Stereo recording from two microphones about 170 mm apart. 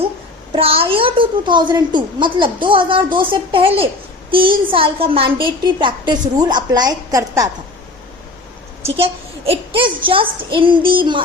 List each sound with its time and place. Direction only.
0.5 s a woman's voice: 35° right (ahead or behind)
9.5 s a child's voice: 30° right (ahead or behind)